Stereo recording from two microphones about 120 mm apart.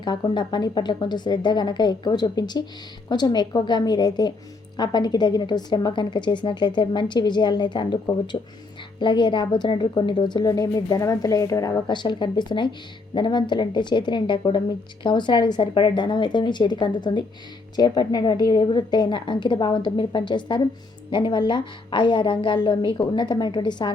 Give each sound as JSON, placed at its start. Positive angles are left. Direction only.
{"t": 0.0, "sound": "a woman's voice", "side_deg": 40}